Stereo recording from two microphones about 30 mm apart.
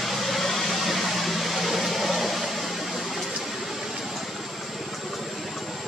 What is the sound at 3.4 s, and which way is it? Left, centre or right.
Vehicle, centre.